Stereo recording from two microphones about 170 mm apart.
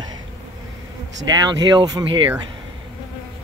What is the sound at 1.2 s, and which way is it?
Speech, 25° right (ahead or behind).